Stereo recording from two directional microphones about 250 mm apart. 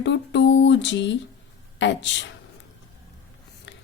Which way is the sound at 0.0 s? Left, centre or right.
Left.